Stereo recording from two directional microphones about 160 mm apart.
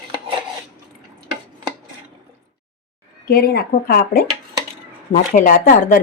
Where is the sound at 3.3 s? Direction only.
75° left (ahead or behind).